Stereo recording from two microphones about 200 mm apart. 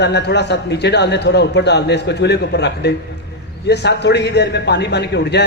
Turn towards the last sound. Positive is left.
turn(degrees=55)  # may be behind; listen again after turning